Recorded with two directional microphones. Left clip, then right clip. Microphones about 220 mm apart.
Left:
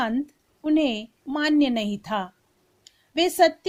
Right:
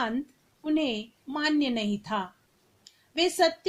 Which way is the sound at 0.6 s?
45° left (ahead or behind).